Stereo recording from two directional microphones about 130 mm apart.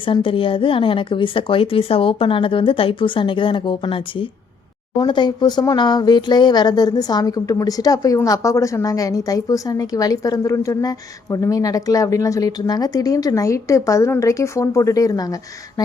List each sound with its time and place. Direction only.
0.0 s a woman's voice: 45° left (ahead or behind)